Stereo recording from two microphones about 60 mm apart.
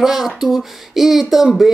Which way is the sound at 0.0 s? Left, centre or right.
Centre.